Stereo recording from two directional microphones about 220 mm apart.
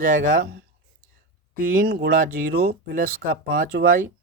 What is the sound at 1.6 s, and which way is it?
Speech, 45° right (ahead or behind).